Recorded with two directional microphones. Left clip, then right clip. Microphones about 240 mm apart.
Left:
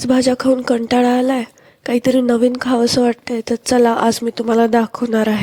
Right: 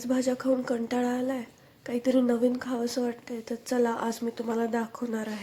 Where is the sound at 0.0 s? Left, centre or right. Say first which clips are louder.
Left 13 dB; left.